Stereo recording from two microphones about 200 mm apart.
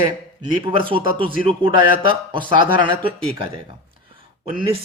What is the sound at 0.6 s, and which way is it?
Speech, 25° right (ahead or behind).